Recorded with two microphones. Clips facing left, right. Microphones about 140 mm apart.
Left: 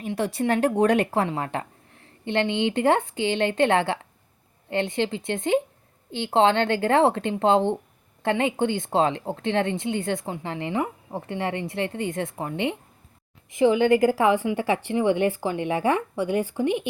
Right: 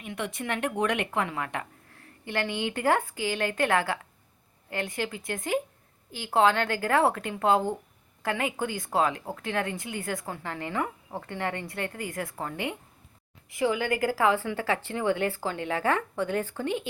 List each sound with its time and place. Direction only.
0.0 s a woman's voice: 35° left (ahead or behind); by 16.8 s 15° left (ahead or behind)